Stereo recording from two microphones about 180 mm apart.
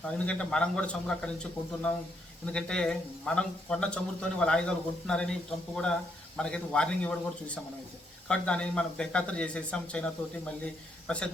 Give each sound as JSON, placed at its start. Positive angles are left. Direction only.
{"t": 0.3, "sound": "speech", "side_deg": 5}